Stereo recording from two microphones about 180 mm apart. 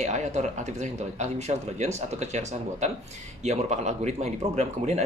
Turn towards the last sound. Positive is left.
turn(degrees=-40)  # may be behind; listen again after turning